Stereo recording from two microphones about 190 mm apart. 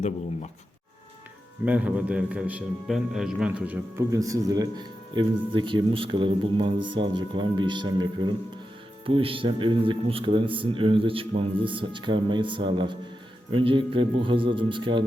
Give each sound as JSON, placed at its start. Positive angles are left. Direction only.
{"t": 1.6, "sound": "a man's voice", "side_deg": -5}